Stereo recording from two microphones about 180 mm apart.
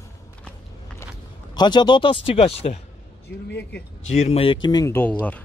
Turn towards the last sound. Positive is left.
turn(degrees=15)  # may be behind; listen again after turning